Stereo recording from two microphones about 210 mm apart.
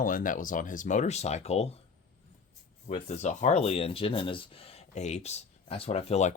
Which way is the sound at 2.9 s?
35° left (ahead or behind).